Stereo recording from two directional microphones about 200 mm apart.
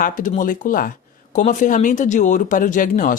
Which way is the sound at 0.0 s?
40° left (ahead or behind).